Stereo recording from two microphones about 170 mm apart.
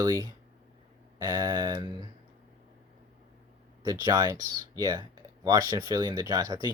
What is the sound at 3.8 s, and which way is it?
Speech, 20° right (ahead or behind).